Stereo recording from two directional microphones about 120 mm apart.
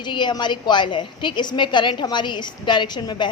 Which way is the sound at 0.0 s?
40° left (ahead or behind).